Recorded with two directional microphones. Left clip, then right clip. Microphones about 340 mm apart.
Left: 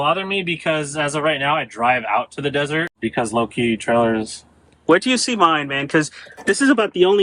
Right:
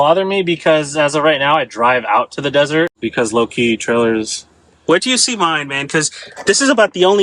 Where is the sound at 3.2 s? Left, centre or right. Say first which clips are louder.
Right 5 dB; centre.